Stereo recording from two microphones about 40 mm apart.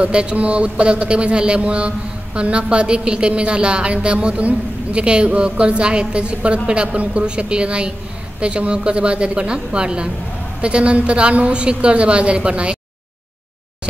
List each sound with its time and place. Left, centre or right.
0.0 s speech: right